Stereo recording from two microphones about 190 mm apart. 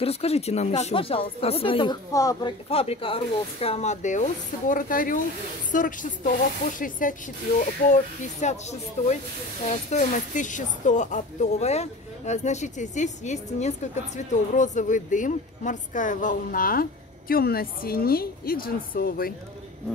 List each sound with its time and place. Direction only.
0.0 s speech: 30° left (ahead or behind)
2.7 s a woman's voice: 30° left (ahead or behind); by 19.3 s 50° left (ahead or behind)